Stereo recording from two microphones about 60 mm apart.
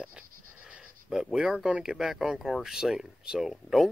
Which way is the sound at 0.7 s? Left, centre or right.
Centre.